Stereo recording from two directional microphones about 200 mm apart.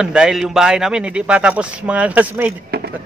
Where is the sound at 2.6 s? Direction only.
55° right (ahead or behind).